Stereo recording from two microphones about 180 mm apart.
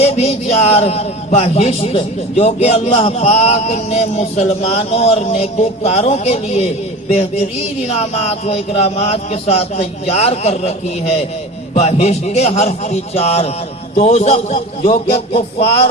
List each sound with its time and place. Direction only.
0.0 s a man's voice: 35° left (ahead or behind)